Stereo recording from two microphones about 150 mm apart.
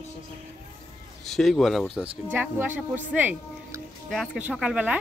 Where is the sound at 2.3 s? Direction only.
15° right (ahead or behind).